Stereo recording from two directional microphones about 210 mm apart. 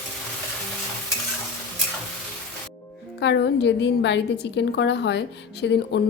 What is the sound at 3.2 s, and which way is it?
A woman's voice, 55° left (ahead or behind).